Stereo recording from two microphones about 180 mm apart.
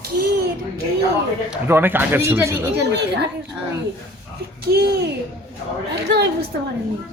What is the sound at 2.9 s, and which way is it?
Speech, 65° right (ahead or behind).